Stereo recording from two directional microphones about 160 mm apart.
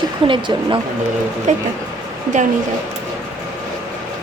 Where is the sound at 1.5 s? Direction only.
45° right (ahead or behind).